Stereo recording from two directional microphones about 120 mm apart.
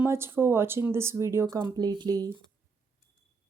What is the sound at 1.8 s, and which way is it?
Speech, 35° right (ahead or behind).